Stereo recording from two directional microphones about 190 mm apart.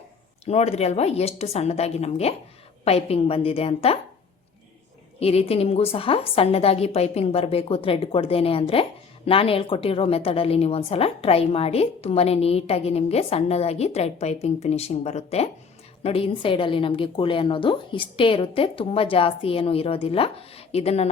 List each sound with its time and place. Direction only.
0.4 s a woman's voice: 35° left (ahead or behind)
5.2 s a woman's voice: 30° left (ahead or behind)